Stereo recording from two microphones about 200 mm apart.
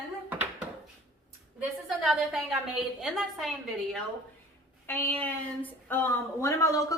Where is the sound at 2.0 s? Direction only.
Centre (ahead or behind).